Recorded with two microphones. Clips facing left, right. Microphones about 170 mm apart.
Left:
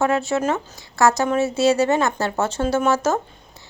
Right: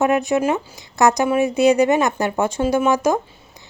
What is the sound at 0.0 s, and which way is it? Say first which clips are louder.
Speech: right 3 dB; 15° right (ahead or behind).